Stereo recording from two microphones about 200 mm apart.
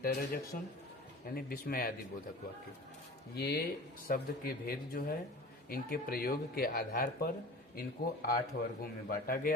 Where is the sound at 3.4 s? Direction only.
55° left (ahead or behind).